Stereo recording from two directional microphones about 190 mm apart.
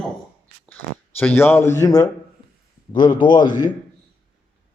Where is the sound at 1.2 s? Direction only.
10° left (ahead or behind).